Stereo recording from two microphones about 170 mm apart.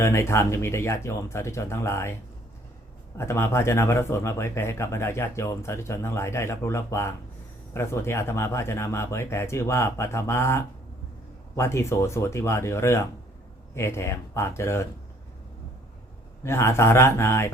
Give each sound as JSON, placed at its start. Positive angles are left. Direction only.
{"t": 0.0, "sound": "speech", "side_deg": 15}
{"t": 3.2, "sound": "speech", "side_deg": 15}
{"t": 16.4, "sound": "speech", "side_deg": 15}